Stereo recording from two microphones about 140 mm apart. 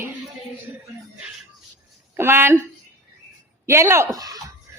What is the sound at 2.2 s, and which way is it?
Speech, 15° right (ahead or behind).